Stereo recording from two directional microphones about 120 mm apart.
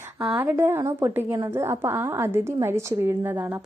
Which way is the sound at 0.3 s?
15° right (ahead or behind).